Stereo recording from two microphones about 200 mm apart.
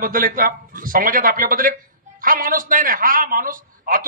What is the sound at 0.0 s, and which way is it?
A man's voice, 45° right (ahead or behind).